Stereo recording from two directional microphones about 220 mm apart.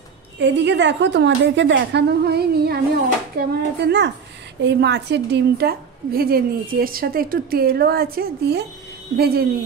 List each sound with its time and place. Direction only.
0.4 s a woman's voice: 55° right (ahead or behind)